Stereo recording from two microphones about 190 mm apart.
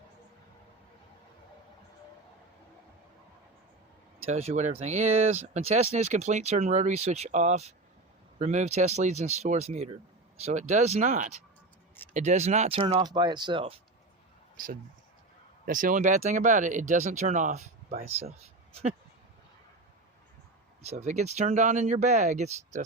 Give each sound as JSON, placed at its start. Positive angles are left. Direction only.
{"t": 4.3, "sound": "speech", "side_deg": -35}
{"t": 15.6, "sound": "speech", "side_deg": -45}
{"t": 20.8, "sound": "speech", "side_deg": -35}